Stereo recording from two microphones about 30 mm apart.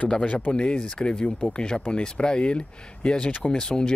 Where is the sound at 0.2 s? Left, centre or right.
Left.